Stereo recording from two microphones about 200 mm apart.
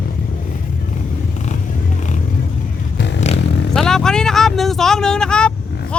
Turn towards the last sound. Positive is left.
turn(degrees=5)  # may be behind; listen again after turning